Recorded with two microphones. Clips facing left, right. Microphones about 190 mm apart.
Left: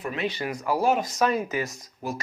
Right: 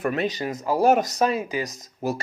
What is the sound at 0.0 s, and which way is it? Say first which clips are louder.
Speech: right 6 dB; 55° right (ahead or behind).